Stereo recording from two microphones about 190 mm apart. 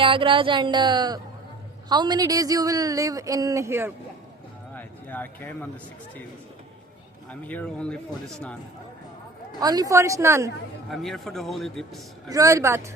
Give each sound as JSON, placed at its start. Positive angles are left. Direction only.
{"t": 0.0, "sound": "speech", "side_deg": -25}
{"t": 4.7, "sound": "speech", "side_deg": 10}
{"t": 7.3, "sound": "speech", "side_deg": 5}
{"t": 9.6, "sound": "a woman's voice", "side_deg": -20}
{"t": 10.8, "sound": "speech", "side_deg": 0}
{"t": 12.3, "sound": "a woman's voice", "side_deg": -15}